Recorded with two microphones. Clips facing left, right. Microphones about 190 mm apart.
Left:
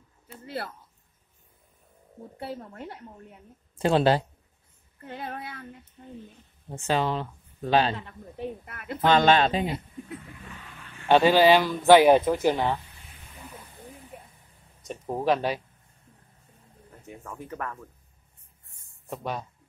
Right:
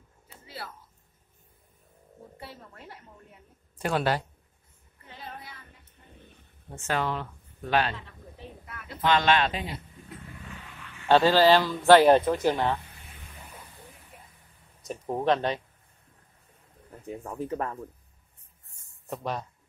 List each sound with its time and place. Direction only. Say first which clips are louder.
2.3 s speech: left 10 dB; 55° left (ahead or behind)
3.7 s a woman's voice: left 6 dB; 25° left (ahead or behind)
5.0 s speech: left 7 dB; 60° left (ahead or behind)
6.7 s speech: left 3 dB; 20° left (ahead or behind)
8.4 s speech: left 10 dB; 55° left (ahead or behind)
9.0 s speech: left 4 dB; 35° left (ahead or behind)
11.1 s speech: left 1 dB; 15° left (ahead or behind)
14.9 s speech: even; 5° left (ahead or behind)
17.0 s speech: right 6 dB; 35° right (ahead or behind)
19.0 s speech: even; centre (ahead or behind)